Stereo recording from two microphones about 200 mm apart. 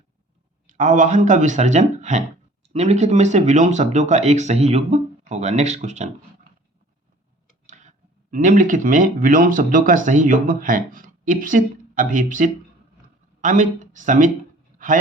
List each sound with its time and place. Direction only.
0.7 s speech: 40° right (ahead or behind)
7.7 s speech: 35° right (ahead or behind)